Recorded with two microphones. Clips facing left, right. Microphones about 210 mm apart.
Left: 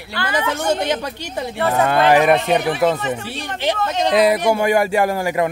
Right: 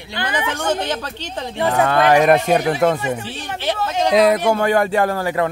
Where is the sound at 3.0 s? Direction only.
10° right (ahead or behind).